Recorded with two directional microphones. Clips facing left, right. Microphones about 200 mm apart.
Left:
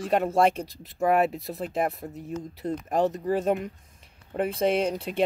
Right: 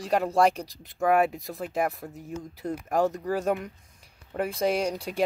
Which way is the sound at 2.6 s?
20° left (ahead or behind).